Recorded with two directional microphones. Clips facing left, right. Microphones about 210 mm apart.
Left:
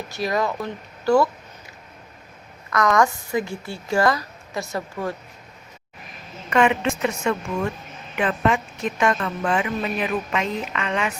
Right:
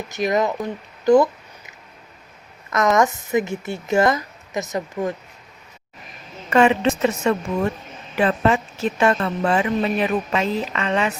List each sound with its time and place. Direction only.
0.1 s speech: 20° right (ahead or behind)
2.6 s speech: 20° right (ahead or behind)
6.5 s a woman's voice: 35° right (ahead or behind)